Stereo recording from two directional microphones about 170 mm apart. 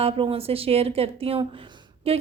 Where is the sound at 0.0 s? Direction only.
35° right (ahead or behind).